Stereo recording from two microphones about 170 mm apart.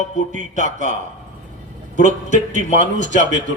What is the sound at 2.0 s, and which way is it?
Speech, 50° right (ahead or behind).